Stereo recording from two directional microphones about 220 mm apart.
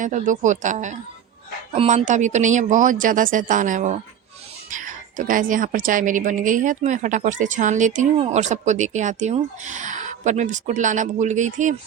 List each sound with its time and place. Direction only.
0.0 s a woman's voice: 35° right (ahead or behind)